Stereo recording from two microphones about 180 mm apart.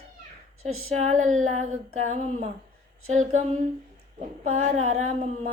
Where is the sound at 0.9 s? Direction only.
40° right (ahead or behind).